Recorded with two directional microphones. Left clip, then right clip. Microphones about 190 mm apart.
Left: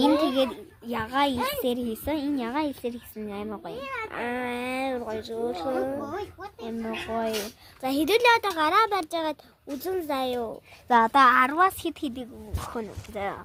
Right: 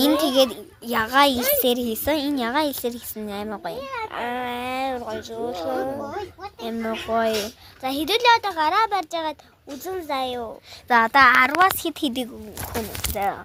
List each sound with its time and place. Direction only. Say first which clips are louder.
0.3 s a child's voice: right 6 dB; 15° right (ahead or behind)
4.1 s speech: right 3 dB; 30° left (ahead or behind)
6.7 s a child's voice: right 6 dB; 15° right (ahead or behind)
7.8 s speech: right 1 dB; 40° left (ahead or behind)
10.8 s speech: right 3 dB; 5° left (ahead or behind)
12.0 s a child's voice: right 8 dB; 25° right (ahead or behind)